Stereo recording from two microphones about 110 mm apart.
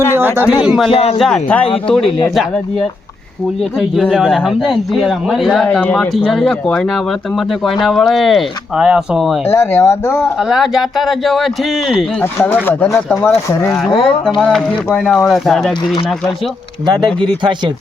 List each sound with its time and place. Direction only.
0.2 s speech: 20° right (ahead or behind)
0.4 s speech: 5° right (ahead or behind)
0.9 s a man's voice: 60° left (ahead or behind)
1.2 s speech: 10° left (ahead or behind)
3.8 s speech: centre (ahead or behind)
5.8 s speech: 10° left (ahead or behind)
9.5 s speech: 25° left (ahead or behind)
10.5 s speech: 5° right (ahead or behind)
12.6 s speech: 20° left (ahead or behind)
13.7 s speech: centre (ahead or behind)
16.8 s speech: 40° right (ahead or behind)